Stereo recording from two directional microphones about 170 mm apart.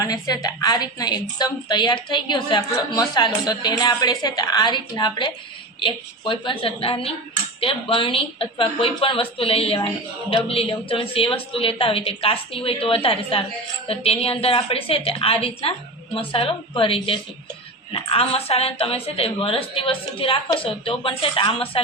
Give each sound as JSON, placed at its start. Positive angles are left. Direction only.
{"t": 0.0, "sound": "a woman's voice", "side_deg": 20}